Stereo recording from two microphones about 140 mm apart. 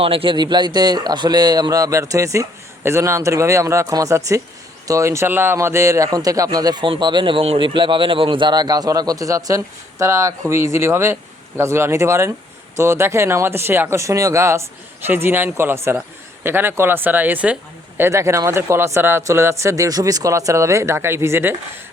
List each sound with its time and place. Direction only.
0.0 s speech: 40° right (ahead or behind); by 21.5 s 15° right (ahead or behind)